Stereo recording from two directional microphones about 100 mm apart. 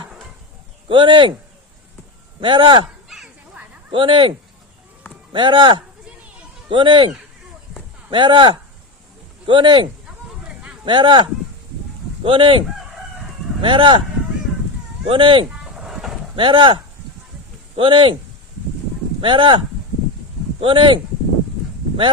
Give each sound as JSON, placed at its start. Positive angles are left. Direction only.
{"t": 0.9, "sound": "speech", "side_deg": -55}
{"t": 2.4, "sound": "speech", "side_deg": -55}
{"t": 3.1, "sound": "bow-wow", "side_deg": -5}
{"t": 3.9, "sound": "speech", "side_deg": -55}
{"t": 8.1, "sound": "speech", "side_deg": -50}
{"t": 10.2, "sound": "a sound", "side_deg": -10}
{"t": 10.8, "sound": "speech", "side_deg": -55}
{"t": 15.0, "sound": "speech", "side_deg": -60}
{"t": 15.6, "sound": "a sound", "side_deg": -5}
{"t": 16.3, "sound": "speech", "side_deg": -55}
{"t": 19.2, "sound": "speech", "side_deg": -55}